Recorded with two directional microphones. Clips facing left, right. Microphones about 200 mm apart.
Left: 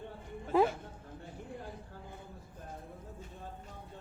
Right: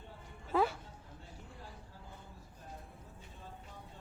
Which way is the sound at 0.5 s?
20° left (ahead or behind).